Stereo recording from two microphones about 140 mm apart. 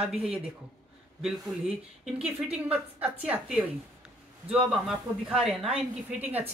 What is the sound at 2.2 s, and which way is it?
A woman's voice, 10° right (ahead or behind).